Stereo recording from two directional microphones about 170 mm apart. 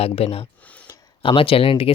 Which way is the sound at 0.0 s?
35° left (ahead or behind).